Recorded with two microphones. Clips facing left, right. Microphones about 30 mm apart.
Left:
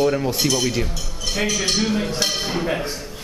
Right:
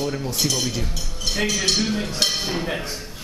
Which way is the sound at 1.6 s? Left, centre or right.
Centre.